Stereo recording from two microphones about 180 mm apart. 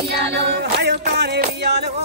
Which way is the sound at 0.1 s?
75° right (ahead or behind).